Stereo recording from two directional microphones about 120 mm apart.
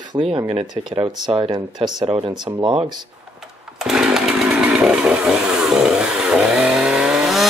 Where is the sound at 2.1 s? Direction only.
55° right (ahead or behind).